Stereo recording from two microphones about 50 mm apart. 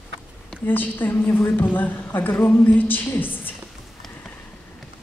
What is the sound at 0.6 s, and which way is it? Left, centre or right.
A woman's voice, left.